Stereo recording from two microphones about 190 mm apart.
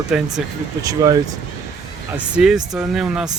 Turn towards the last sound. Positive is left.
turn(degrees=-5)  # may be behind; listen again after turning